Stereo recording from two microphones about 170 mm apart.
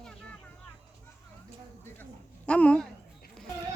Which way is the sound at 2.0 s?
5° left (ahead or behind).